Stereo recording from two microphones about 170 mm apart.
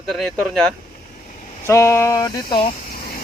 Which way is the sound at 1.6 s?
15° left (ahead or behind).